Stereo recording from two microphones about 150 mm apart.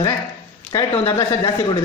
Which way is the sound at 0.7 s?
10° left (ahead or behind).